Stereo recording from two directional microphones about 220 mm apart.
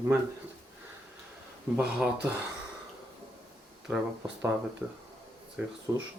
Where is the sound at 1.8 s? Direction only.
5° right (ahead or behind).